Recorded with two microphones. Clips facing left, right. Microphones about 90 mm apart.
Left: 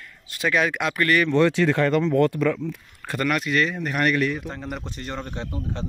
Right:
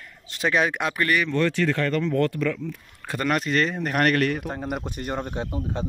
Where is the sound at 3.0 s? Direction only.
15° right (ahead or behind).